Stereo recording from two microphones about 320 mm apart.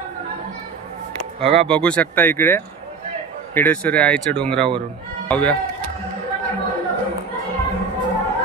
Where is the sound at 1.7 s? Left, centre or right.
Centre.